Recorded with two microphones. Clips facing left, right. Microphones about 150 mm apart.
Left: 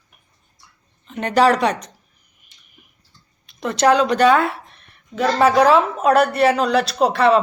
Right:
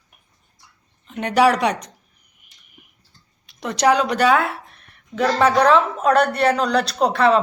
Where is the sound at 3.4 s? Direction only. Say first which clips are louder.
Left 2 dB; 15° right (ahead or behind).